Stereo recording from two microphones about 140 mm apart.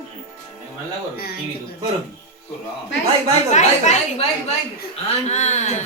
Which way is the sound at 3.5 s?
55° left (ahead or behind).